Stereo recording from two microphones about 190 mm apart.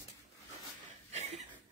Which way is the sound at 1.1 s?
35° right (ahead or behind).